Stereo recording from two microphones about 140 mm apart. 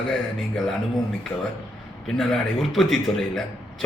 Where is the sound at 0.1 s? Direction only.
Centre (ahead or behind).